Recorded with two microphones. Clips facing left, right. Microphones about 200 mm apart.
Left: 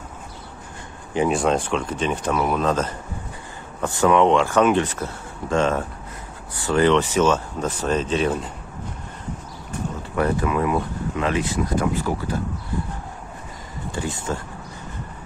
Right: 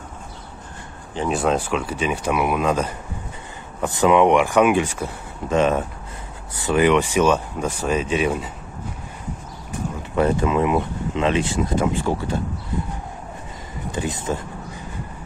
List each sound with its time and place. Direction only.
1.3 s speech: 5° right (ahead or behind)
10.1 s speech: 20° right (ahead or behind)
13.9 s speech: 20° right (ahead or behind)